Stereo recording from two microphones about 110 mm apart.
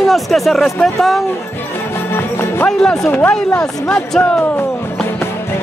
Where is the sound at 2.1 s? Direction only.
20° left (ahead or behind).